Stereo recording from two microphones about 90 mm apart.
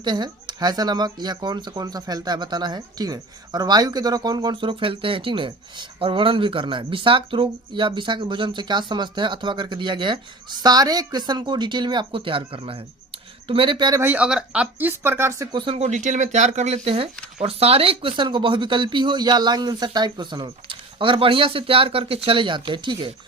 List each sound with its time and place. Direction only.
0.0 s speech: 55° right (ahead or behind); by 12.8 s 90° right
13.5 s speech: 75° right (ahead or behind); by 14.0 s 55° right (ahead or behind)
14.2 s speech: 10° right (ahead or behind); by 15.4 s 25° right (ahead or behind)
15.5 s speech: 75° right (ahead or behind)
17.4 s speech: 90° right; by 23.1 s 60° right (ahead or behind)